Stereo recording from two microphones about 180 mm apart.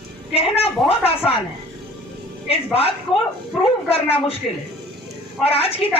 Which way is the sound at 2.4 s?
35° left (ahead or behind).